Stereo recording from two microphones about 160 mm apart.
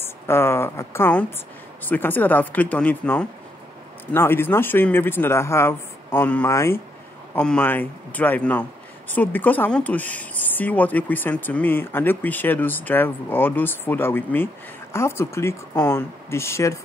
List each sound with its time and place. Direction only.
0.0 s a woman's voice: 15° left (ahead or behind)